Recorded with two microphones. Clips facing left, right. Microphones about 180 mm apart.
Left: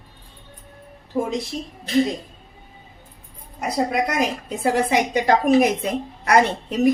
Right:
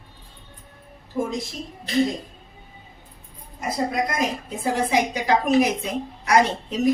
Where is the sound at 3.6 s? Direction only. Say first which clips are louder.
Left 3 dB; 70° left (ahead or behind).